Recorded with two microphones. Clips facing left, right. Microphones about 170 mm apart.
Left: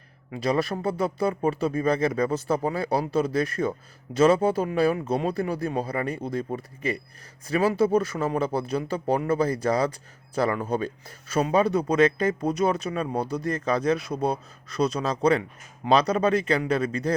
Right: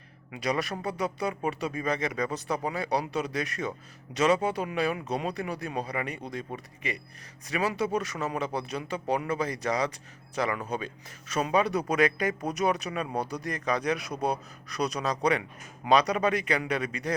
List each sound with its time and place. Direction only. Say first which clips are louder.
0.3 s speech: left 5 dB; 30° left (ahead or behind)